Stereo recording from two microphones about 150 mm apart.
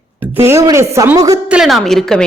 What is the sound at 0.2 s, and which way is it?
A woman's voice, 15° right (ahead or behind).